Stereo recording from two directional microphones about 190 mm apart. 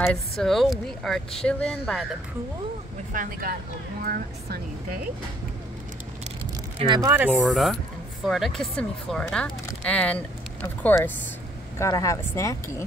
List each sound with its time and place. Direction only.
0.0 s speech: 5° left (ahead or behind)
3.1 s speech: 45° right (ahead or behind)
6.8 s speech: 25° right (ahead or behind)
7.1 s speech: 10° right (ahead or behind); by 12.8 s 15° left (ahead or behind)